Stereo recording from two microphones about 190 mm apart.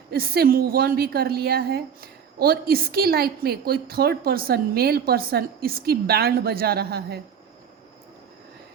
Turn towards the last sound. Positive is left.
turn(degrees=-55)  # may be behind; listen again after turning